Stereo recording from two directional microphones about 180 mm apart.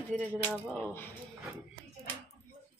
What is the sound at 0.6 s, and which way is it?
Speech, 5° left (ahead or behind).